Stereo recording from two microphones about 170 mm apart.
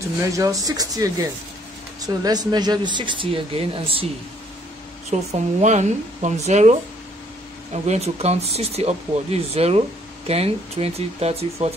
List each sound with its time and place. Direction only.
0.4 s speech: 20° right (ahead or behind)
5.1 s speech: 45° right (ahead or behind)